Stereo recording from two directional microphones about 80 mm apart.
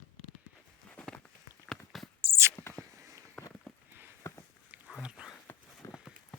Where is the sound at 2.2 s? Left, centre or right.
Right.